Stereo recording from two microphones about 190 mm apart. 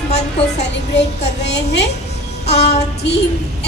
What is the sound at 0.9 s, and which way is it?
Speech, 65° left (ahead or behind).